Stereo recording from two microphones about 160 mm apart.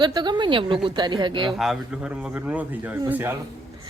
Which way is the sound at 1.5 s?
Centre (ahead or behind).